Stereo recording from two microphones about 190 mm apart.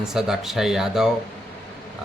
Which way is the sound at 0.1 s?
Centre (ahead or behind).